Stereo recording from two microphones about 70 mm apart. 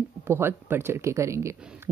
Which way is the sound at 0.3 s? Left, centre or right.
Right.